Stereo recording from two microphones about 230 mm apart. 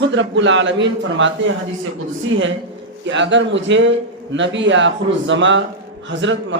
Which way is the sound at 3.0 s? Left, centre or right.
Right.